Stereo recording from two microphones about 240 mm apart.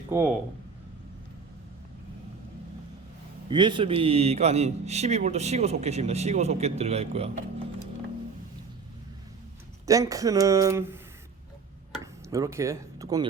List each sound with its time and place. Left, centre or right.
0.1 s speech: centre
3.5 s a man's voice: centre
9.8 s speech: centre
12.3 s speech: centre